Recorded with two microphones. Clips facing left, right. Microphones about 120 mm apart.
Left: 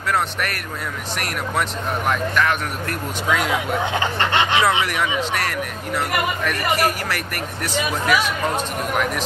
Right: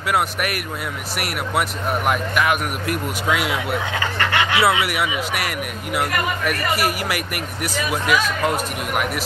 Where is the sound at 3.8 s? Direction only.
25° left (ahead or behind).